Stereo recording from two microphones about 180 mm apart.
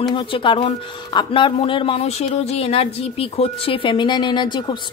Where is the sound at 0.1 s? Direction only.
25° left (ahead or behind).